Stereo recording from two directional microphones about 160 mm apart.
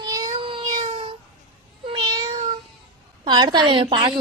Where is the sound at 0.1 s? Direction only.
25° right (ahead or behind).